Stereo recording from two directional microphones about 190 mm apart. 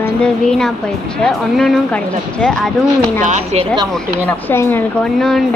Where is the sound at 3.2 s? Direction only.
40° right (ahead or behind).